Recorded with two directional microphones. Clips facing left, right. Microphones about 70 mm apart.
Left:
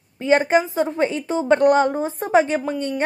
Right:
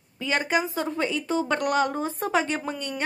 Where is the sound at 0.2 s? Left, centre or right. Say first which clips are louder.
Left 8 dB; left.